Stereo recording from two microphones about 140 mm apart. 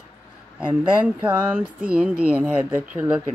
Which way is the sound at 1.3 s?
15° right (ahead or behind).